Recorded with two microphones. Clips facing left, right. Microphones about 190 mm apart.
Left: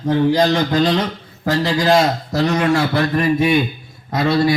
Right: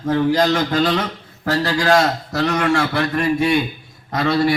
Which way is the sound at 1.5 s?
20° left (ahead or behind).